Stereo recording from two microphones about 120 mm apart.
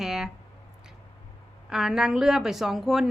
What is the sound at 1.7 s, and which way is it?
A woman's voice, 5° right (ahead or behind).